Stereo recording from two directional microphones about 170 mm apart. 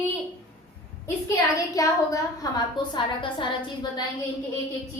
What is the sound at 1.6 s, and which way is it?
A woman's voice, 20° left (ahead or behind).